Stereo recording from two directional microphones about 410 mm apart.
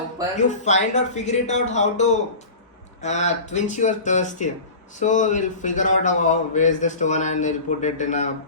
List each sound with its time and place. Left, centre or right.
0.3 s speech: centre